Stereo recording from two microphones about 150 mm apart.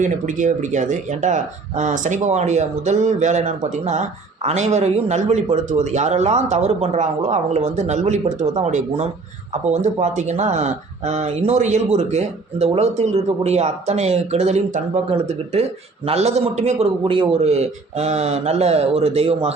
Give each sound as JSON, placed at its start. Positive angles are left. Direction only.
{"t": 0.0, "sound": "speech", "side_deg": -55}